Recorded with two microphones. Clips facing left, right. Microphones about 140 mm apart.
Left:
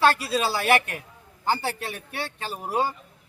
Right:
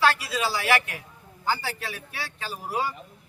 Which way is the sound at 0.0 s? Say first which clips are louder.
Left 2 dB; 30° left (ahead or behind).